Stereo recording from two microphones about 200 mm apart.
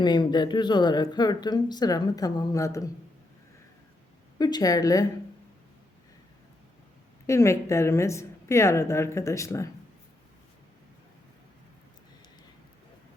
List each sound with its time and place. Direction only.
0.0 s speech: 20° left (ahead or behind)
4.4 s a woman's voice: 20° left (ahead or behind)
7.3 s a woman's voice: 15° left (ahead or behind)